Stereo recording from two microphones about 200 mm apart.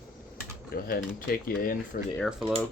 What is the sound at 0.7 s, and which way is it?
Speech, 45° left (ahead or behind).